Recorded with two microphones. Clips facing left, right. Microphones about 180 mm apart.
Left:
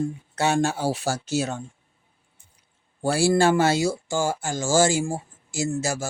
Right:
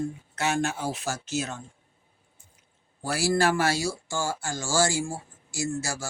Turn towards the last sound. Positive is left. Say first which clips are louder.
# left 5 dB
turn(degrees=20)  # may be behind; listen again after turning